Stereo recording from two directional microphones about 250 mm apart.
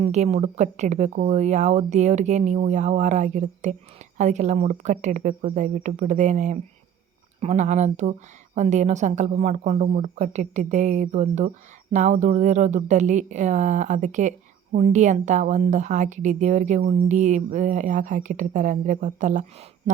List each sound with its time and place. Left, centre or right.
0.0 s a woman's voice: right